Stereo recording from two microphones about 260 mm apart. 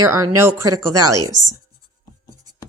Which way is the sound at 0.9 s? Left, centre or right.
Right.